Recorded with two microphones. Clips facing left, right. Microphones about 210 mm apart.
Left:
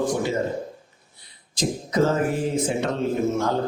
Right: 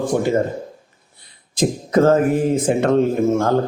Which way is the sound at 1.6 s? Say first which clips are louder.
Right 6 dB; 55° right (ahead or behind).